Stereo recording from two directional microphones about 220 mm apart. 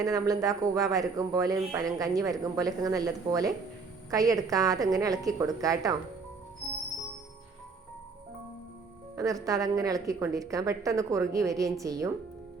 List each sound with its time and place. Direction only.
0.0 s speech: 15° right (ahead or behind)
9.1 s speech: 15° right (ahead or behind)